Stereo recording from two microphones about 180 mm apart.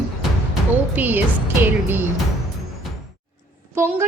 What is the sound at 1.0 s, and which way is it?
Music, 10° right (ahead or behind).